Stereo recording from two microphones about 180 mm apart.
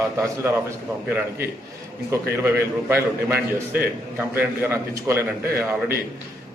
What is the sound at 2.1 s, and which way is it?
A man's voice, 15° right (ahead or behind).